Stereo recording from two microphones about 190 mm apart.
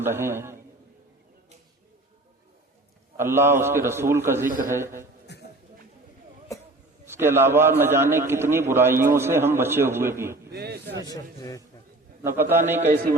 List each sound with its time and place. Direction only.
0.0 s a man's voice: 10° right (ahead or behind)
3.2 s a man's voice: 10° right (ahead or behind)
4.4 s a man's voice: 45° right (ahead or behind)
4.7 s a man's voice: 15° right (ahead or behind)
5.3 s a sound: 60° left (ahead or behind)
7.0 s a man's voice: 10° right (ahead or behind)
10.5 s a man's voice: 60° right (ahead or behind)
11.0 s a man's voice: 20° left (ahead or behind)
12.2 s a man's voice: 10° right (ahead or behind)